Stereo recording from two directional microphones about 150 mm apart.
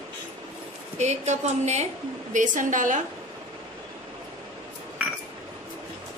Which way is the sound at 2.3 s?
60° right (ahead or behind).